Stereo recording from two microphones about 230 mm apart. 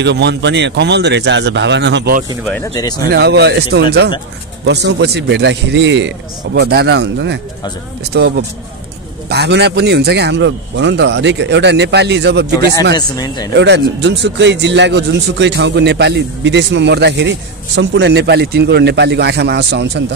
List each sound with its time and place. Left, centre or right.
0.0 s a man's voice: right
2.4 s speech: centre
2.7 s speech: centre
3.1 s a man's voice: right
12.9 s speech: centre
13.5 s a man's voice: right